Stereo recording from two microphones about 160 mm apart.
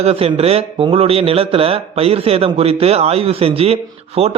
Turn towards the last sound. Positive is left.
turn(degrees=-40)  # may be behind; listen again after turning